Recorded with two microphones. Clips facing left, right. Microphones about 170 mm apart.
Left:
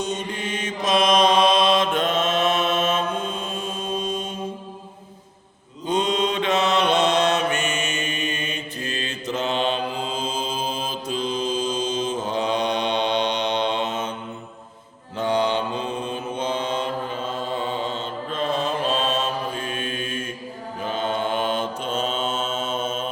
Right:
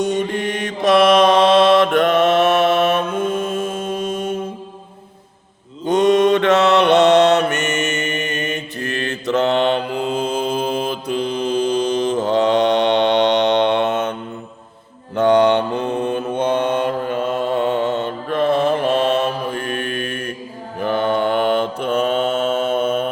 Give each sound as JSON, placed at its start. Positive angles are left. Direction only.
{"t": 0.0, "sound": "mantra", "side_deg": -60}
{"t": 5.8, "sound": "mantra", "side_deg": -70}